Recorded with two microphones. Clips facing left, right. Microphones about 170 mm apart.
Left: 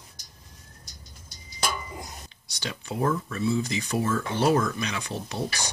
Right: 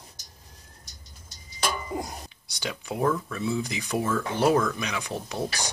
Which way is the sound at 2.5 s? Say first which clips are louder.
Right 1 dB; 10° right (ahead or behind).